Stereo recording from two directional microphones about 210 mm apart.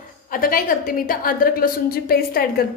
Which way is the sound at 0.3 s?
45° left (ahead or behind).